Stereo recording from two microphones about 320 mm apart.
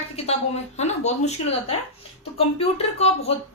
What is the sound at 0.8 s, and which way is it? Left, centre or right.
Speech, left.